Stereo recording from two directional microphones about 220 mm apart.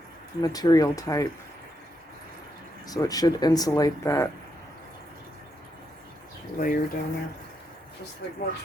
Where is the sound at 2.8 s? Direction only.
15° left (ahead or behind).